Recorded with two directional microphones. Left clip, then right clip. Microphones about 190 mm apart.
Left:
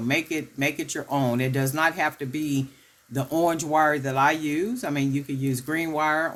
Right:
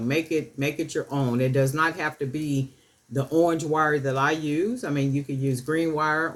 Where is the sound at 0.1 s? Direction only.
40° left (ahead or behind).